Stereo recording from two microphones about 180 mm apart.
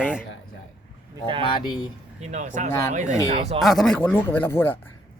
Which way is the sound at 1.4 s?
25° left (ahead or behind).